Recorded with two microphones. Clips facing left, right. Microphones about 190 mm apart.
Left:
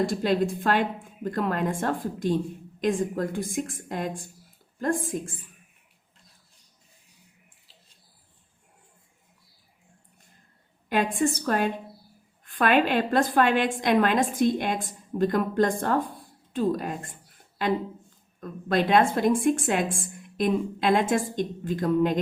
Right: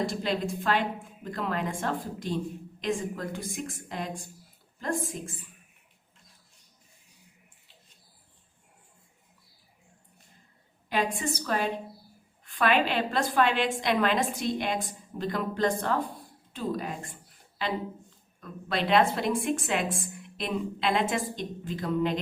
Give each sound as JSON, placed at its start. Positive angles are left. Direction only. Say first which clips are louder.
{"t": 0.0, "sound": "a woman's voice", "louder": "left 6 dB", "side_deg": 50}
{"t": 10.8, "sound": "a woman's voice", "louder": "left 5 dB", "side_deg": 50}
{"t": 18.3, "sound": "a woman's voice", "louder": "left 6 dB", "side_deg": 45}